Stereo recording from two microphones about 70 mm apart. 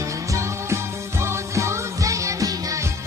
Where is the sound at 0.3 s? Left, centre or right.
Right.